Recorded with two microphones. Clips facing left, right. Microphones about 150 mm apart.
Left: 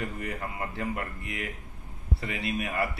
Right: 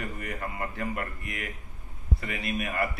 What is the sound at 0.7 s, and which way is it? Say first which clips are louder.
Speech: even; 25° left (ahead or behind).